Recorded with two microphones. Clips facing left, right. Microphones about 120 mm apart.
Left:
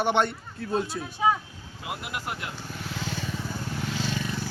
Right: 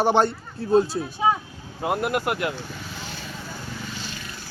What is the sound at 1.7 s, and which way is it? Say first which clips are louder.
Speech: right 11 dB; 55° right (ahead or behind).